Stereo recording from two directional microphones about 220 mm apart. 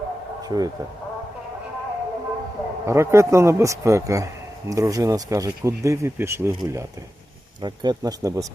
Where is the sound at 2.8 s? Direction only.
10° right (ahead or behind).